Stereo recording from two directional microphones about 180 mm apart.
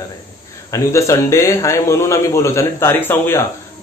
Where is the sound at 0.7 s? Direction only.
15° left (ahead or behind).